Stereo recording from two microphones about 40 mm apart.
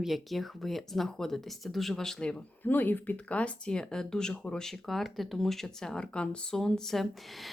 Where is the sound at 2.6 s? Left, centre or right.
Left.